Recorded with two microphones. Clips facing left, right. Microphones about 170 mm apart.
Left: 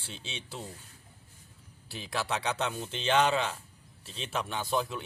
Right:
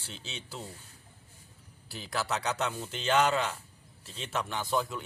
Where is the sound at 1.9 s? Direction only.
20° left (ahead or behind).